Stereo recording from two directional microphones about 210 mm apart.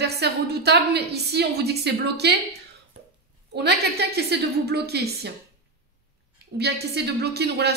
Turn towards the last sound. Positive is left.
turn(degrees=-50)  # may be behind; listen again after turning